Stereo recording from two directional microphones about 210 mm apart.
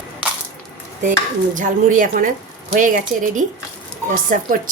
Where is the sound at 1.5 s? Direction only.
40° right (ahead or behind).